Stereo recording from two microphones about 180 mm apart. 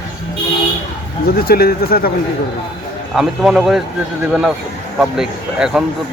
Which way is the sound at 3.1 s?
Centre (ahead or behind).